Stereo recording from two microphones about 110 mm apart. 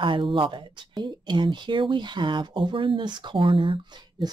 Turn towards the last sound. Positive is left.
turn(degrees=-45)  # may be behind; listen again after turning